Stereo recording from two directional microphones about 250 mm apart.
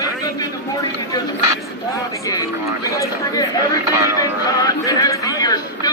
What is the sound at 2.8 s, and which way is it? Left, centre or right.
Speech, centre.